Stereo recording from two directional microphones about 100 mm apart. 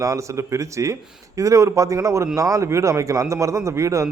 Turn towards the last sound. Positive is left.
turn(degrees=-30)  # may be behind; listen again after turning